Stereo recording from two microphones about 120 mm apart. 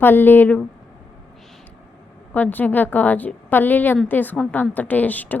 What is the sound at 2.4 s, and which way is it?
A woman's voice, 15° left (ahead or behind).